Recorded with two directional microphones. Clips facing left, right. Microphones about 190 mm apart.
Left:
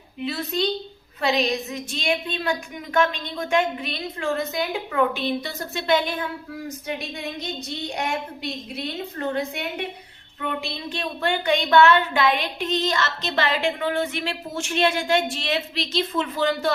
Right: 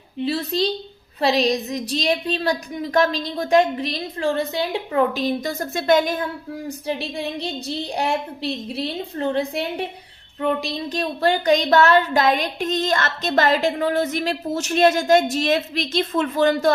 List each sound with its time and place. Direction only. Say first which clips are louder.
0.2 s a woman's voice: right 4 dB; 30° right (ahead or behind)
6.7 s a woman's voice: right 5 dB; 30° right (ahead or behind)